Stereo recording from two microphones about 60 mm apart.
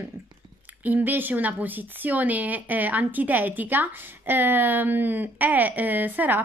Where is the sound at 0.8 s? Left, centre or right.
Right.